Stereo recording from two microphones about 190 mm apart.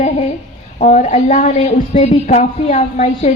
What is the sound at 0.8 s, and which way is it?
A woman's voice, 40° left (ahead or behind).